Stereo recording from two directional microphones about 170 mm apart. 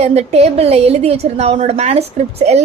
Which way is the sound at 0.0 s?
40° right (ahead or behind).